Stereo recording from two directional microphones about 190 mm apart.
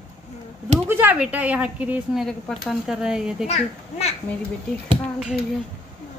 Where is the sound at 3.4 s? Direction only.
35° left (ahead or behind).